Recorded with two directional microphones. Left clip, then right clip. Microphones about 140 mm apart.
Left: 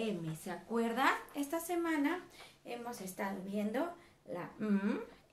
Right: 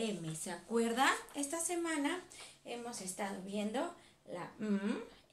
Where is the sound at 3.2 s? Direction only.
30° left (ahead or behind).